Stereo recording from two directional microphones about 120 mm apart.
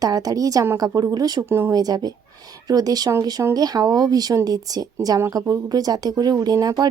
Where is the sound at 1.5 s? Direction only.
20° right (ahead or behind).